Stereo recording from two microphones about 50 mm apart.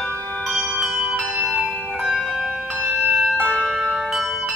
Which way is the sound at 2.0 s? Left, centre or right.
Centre.